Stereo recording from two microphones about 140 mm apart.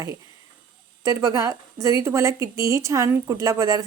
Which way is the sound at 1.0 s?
25° right (ahead or behind).